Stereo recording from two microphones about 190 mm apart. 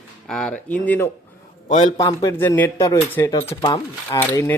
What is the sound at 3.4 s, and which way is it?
Speech, 30° left (ahead or behind).